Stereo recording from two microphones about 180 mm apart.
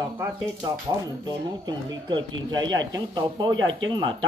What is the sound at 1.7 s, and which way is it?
Speech, 25° right (ahead or behind).